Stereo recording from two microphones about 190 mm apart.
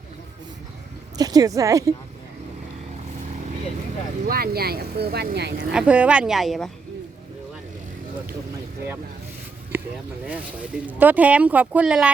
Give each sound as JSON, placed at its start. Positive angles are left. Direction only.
{"t": 1.1, "sound": "a woman's voice", "side_deg": -20}
{"t": 4.3, "sound": "speech", "side_deg": -55}
{"t": 5.7, "sound": "speech", "side_deg": -5}
{"t": 10.8, "sound": "speech", "side_deg": -10}